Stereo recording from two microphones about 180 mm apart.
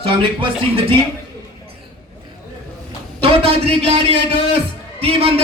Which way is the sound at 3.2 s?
35° right (ahead or behind).